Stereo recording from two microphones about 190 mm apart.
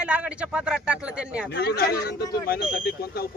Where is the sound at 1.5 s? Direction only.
55° left (ahead or behind).